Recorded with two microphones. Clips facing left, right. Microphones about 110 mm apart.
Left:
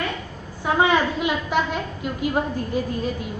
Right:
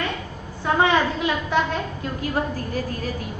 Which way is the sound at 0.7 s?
15° left (ahead or behind).